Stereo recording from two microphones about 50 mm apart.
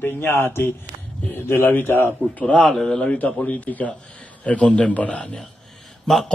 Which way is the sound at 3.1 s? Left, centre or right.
Left.